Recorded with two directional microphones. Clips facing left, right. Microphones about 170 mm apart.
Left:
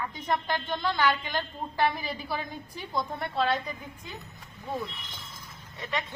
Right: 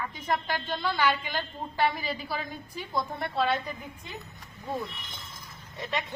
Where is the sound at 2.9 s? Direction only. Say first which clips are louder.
Even; centre (ahead or behind).